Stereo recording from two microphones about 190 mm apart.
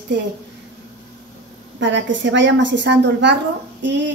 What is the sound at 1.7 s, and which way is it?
A woman's voice, 75° right (ahead or behind).